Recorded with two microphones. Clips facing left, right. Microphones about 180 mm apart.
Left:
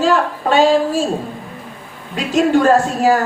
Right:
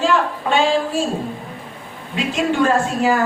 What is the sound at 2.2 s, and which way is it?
A woman's voice, 40° left (ahead or behind).